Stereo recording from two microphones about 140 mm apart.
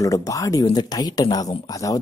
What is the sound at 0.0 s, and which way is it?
Speech, 25° left (ahead or behind).